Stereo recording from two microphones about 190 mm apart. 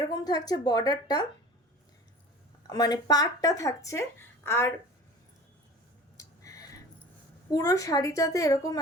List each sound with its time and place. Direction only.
0.1 s a woman's voice: 20° left (ahead or behind)
2.6 s speech: 20° left (ahead or behind)
6.1 s a sound: 15° left (ahead or behind)
7.5 s speech: 20° left (ahead or behind)